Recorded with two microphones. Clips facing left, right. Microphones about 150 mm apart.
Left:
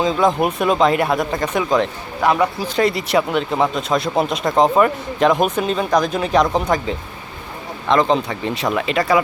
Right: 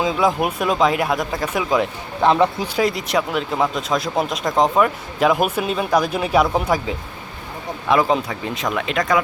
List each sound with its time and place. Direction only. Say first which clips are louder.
0.0 s speech: left 2 dB; 5° right (ahead or behind)
2.2 s speech: right 1 dB; 25° right (ahead or behind)
2.7 s speech: left 6 dB; centre (ahead or behind)